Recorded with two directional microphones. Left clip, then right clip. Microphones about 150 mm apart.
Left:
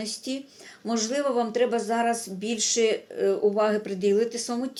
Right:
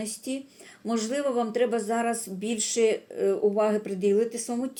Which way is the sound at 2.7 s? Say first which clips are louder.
Right 1 dB; 15° right (ahead or behind).